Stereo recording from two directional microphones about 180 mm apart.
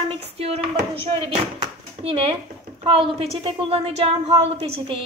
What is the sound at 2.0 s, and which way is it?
A woman's voice, 35° right (ahead or behind).